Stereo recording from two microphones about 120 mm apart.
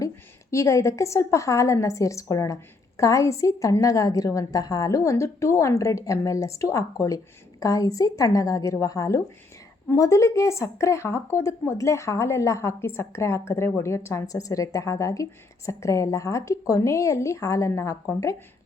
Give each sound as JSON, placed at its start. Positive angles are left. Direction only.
{"t": 0.5, "sound": "a woman's voice", "side_deg": 25}